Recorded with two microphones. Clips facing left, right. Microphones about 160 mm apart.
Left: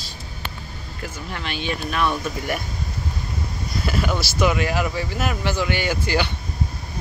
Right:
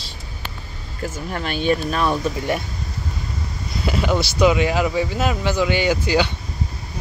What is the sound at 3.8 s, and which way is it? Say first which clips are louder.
Speech: right 4 dB; 20° right (ahead or behind).